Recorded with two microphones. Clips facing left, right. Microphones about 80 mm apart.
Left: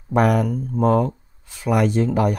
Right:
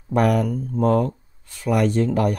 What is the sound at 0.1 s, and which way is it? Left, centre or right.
Speech, centre.